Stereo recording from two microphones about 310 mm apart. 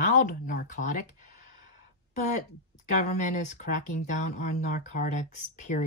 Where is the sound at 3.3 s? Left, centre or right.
Left.